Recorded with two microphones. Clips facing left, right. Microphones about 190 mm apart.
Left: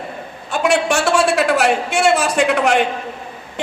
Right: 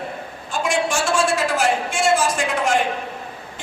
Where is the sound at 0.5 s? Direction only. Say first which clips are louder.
Left 5 dB; 65° left (ahead or behind).